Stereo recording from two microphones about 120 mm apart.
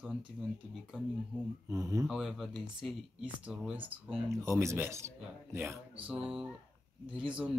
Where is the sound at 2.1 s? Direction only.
5° right (ahead or behind).